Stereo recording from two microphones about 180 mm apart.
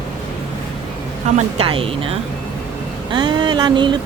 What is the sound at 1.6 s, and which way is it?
Speech, 30° right (ahead or behind).